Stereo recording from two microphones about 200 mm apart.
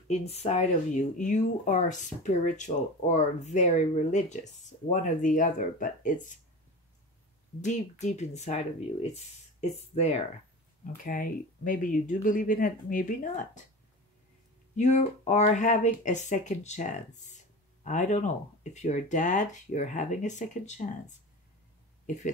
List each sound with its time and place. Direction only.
0.1 s speech: 35° left (ahead or behind)
7.6 s speech: 35° left (ahead or behind)
14.8 s speech: 35° left (ahead or behind)